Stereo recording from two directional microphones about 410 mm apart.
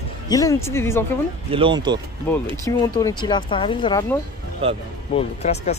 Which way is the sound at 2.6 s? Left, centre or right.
Centre.